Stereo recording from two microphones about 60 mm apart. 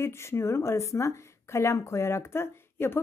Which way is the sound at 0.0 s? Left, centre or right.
Left.